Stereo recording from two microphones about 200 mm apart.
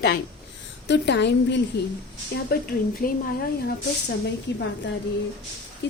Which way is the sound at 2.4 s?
50° left (ahead or behind).